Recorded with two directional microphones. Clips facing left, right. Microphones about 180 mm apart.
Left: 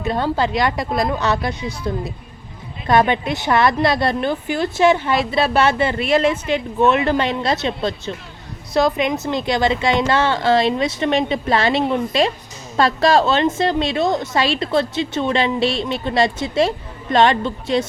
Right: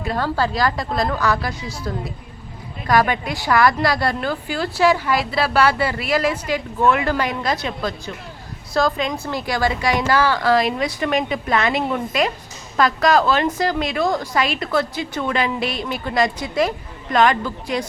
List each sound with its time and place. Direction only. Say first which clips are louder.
0.0 s a woman's voice: left 2 dB; 20° left (ahead or behind)